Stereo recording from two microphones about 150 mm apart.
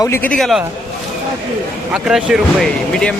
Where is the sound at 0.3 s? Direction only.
Centre (ahead or behind).